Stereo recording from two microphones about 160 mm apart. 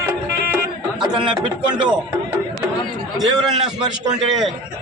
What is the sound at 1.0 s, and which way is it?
Speech, 5° right (ahead or behind).